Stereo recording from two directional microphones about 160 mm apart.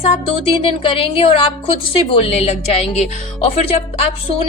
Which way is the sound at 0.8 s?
35° left (ahead or behind).